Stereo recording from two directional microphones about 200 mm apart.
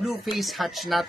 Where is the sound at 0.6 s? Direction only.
Centre (ahead or behind).